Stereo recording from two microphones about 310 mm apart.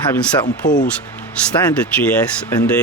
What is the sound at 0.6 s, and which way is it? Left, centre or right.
Speech, left.